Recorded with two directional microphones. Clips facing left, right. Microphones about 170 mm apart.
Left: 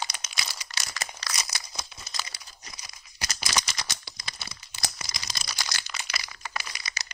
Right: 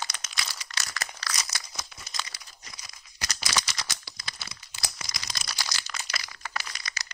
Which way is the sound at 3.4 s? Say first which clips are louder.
Even; 20° left (ahead or behind).